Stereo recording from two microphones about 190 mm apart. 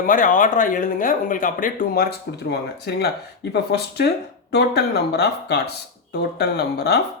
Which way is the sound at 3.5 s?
60° left (ahead or behind).